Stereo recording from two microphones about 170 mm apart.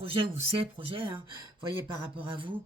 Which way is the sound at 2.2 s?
30° right (ahead or behind).